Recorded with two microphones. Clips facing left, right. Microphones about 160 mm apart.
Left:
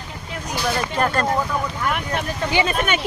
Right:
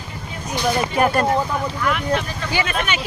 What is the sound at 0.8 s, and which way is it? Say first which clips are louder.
Speech: right 4 dB; 10° right (ahead or behind).